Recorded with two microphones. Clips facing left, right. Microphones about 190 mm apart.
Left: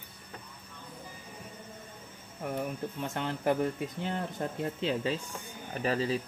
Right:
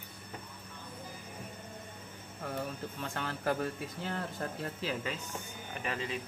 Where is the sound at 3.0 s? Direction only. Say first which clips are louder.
Left 4 dB; 20° left (ahead or behind).